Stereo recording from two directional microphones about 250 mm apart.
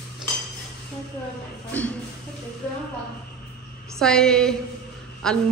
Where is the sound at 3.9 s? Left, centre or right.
Centre.